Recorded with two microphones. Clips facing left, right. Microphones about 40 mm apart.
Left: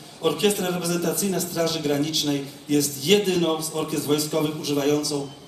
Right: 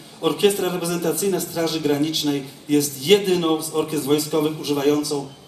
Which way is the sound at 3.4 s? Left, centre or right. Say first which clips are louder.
Right 3 dB; centre.